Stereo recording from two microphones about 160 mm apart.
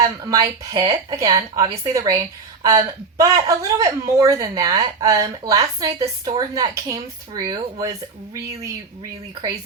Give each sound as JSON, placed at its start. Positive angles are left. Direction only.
{"t": 0.0, "sound": "a woman's voice", "side_deg": -20}